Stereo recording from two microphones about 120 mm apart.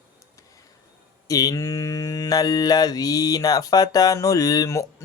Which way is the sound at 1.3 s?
30° left (ahead or behind).